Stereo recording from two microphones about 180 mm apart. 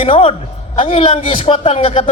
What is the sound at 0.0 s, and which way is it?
Speech, 30° left (ahead or behind).